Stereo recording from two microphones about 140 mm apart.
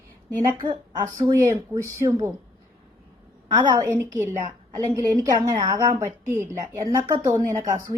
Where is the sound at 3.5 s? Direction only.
30° right (ahead or behind).